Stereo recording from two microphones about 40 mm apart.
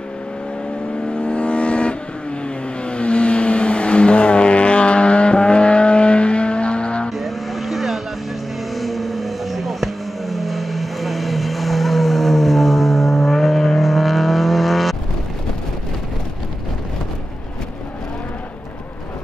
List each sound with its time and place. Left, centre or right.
1.0 s vehicle: left
7.1 s vehicle: centre